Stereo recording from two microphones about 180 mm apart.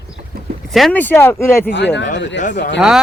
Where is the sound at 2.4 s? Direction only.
45° left (ahead or behind).